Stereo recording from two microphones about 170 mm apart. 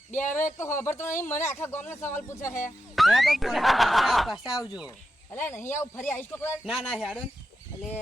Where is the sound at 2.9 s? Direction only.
Centre (ahead or behind).